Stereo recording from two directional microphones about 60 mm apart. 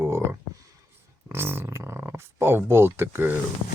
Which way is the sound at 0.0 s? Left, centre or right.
Right.